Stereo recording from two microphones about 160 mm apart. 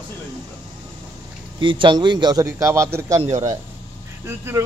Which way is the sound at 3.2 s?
45° right (ahead or behind).